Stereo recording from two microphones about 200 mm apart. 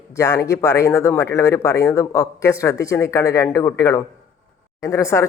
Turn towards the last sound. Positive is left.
turn(degrees=15)  # may be behind; listen again after turning